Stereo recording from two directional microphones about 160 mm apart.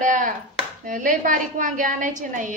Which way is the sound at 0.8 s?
55° right (ahead or behind).